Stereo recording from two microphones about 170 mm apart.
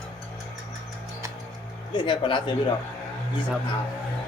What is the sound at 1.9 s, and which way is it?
Speech, 30° left (ahead or behind).